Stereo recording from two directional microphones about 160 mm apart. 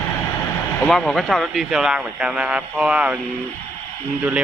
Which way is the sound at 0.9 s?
5° left (ahead or behind).